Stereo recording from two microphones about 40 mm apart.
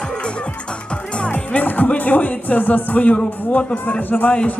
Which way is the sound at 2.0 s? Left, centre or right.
Left.